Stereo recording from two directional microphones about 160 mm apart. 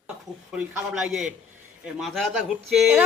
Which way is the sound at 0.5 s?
10° right (ahead or behind).